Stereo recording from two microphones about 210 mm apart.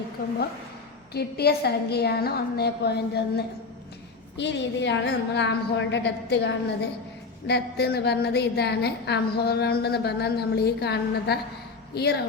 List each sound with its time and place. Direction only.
1.1 s a woman's voice: 50° left (ahead or behind)